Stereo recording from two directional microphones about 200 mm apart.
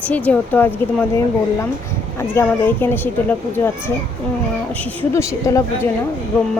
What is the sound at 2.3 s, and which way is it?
A woman's voice, 10° left (ahead or behind).